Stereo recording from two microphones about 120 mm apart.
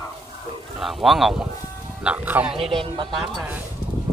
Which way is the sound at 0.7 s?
Centre (ahead or behind).